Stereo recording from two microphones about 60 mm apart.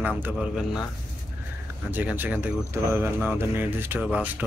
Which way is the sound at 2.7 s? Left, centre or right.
Right.